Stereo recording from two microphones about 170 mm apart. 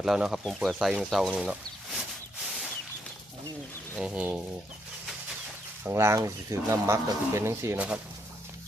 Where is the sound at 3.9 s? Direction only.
5° right (ahead or behind).